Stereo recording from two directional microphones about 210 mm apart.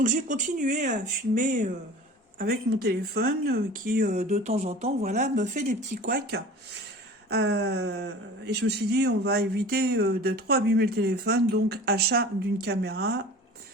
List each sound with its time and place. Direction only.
0.0 s speech: 35° right (ahead or behind)
7.5 s speech: 50° right (ahead or behind)